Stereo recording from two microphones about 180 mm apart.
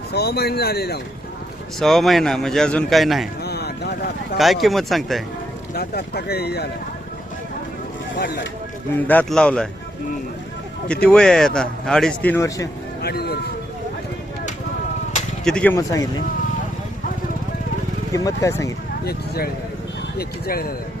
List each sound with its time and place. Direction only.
0.1 s speech: 60° left (ahead or behind)
1.8 s speech: centre (ahead or behind)
3.4 s a sound: 65° left (ahead or behind)
4.4 s speech: centre (ahead or behind)
5.7 s speech: 60° left (ahead or behind)
8.9 s speech: 10° left (ahead or behind)
10.8 s speech: 5° left (ahead or behind)
13.0 s speech: 60° left (ahead or behind)
15.4 s speech: 5° left (ahead or behind)
18.1 s speech: 20° left (ahead or behind)
19.0 s speech: 60° left (ahead or behind)